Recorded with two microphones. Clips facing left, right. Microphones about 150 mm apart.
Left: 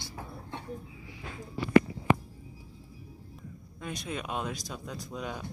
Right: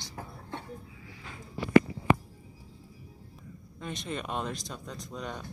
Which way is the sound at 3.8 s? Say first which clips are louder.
Even; centre (ahead or behind).